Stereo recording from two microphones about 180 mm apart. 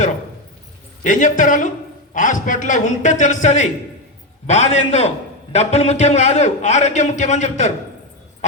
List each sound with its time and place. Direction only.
1.0 s a man's voice: 45° left (ahead or behind)